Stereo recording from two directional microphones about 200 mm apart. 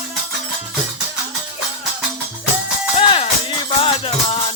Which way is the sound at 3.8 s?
30° left (ahead or behind).